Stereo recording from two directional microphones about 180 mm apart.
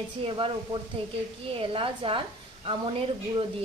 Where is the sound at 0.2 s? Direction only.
30° right (ahead or behind).